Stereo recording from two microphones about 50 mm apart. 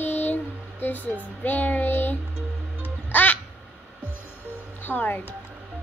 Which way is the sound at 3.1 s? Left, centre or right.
Left.